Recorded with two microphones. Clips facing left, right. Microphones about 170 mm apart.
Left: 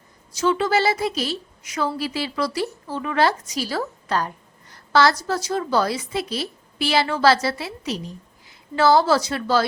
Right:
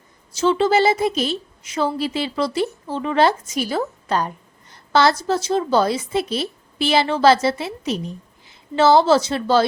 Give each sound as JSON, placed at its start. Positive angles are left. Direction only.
{"t": 0.3, "sound": "a woman's voice", "side_deg": -30}